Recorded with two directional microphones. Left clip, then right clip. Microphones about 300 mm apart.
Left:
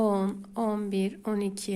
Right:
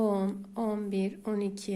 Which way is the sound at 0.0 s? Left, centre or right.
Centre.